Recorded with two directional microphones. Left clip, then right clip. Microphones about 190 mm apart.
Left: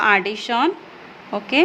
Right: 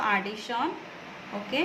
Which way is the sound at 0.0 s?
55° left (ahead or behind).